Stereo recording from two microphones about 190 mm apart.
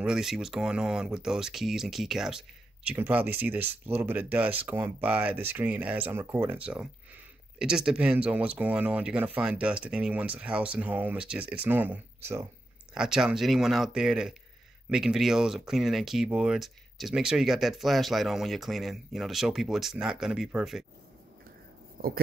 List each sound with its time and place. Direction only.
0.0 s speech: centre (ahead or behind)
22.0 s speech: 55° right (ahead or behind)